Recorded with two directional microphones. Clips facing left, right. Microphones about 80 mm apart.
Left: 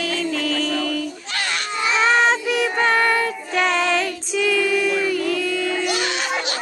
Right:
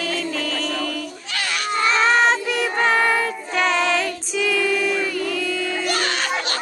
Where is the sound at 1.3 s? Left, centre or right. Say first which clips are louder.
Right 1 dB; left.